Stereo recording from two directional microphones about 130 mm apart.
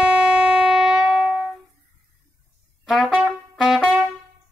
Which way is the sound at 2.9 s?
Centre (ahead or behind).